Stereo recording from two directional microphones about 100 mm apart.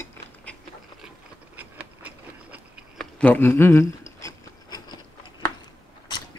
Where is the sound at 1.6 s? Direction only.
15° right (ahead or behind).